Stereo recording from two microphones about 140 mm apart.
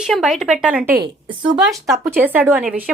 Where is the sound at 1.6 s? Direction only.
Centre (ahead or behind).